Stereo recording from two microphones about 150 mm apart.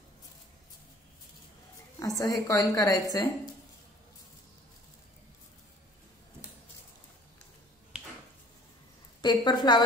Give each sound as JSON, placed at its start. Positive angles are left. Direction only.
{"t": 2.0, "sound": "a woman's voice", "side_deg": 25}
{"t": 9.2, "sound": "a woman's voice", "side_deg": 30}